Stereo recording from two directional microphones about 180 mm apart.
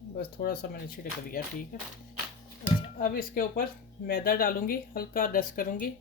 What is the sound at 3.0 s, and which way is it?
Speech, 50° left (ahead or behind).